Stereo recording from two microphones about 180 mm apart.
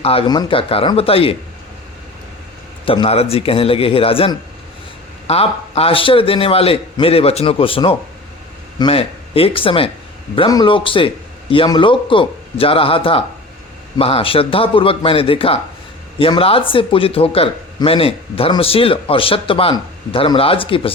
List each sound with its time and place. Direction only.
0.0 s speech: 30° left (ahead or behind)
2.8 s a man's voice: 30° left (ahead or behind)